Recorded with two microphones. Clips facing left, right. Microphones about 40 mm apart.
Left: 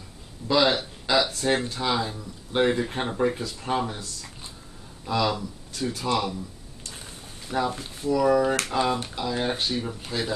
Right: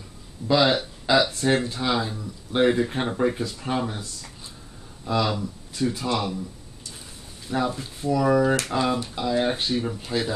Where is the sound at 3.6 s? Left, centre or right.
Centre.